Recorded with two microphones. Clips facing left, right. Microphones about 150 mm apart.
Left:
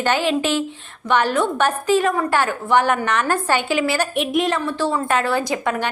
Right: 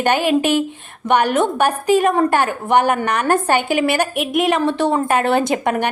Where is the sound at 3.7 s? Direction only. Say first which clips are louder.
Right 3 dB; 55° right (ahead or behind).